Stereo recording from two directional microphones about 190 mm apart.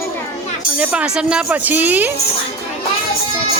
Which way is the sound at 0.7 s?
5° right (ahead or behind).